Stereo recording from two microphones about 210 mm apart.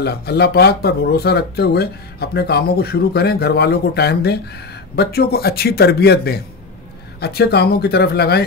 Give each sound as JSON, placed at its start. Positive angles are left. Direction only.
{"t": 0.0, "sound": "speech", "side_deg": 50}